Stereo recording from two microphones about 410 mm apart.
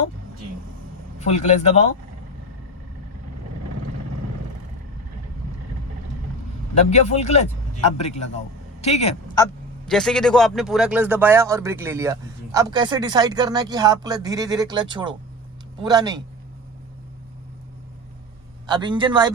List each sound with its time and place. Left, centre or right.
1.2 s speech: centre
6.9 s speech: centre
18.6 s speech: centre